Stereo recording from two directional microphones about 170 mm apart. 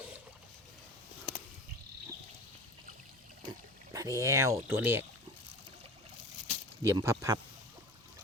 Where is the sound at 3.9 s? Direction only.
20° right (ahead or behind).